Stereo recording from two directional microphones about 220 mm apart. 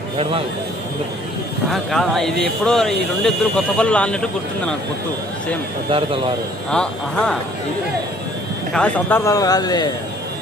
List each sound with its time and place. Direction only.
0.2 s speech: 25° right (ahead or behind)
1.7 s speech: centre (ahead or behind)
5.9 s speech: 25° right (ahead or behind)
6.7 s speech: 5° left (ahead or behind)
8.7 s a man's voice: 5° left (ahead or behind)